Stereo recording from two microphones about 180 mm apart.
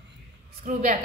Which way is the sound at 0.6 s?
45° right (ahead or behind).